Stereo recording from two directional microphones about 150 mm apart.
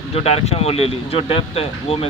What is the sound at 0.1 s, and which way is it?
Speech, 45° left (ahead or behind).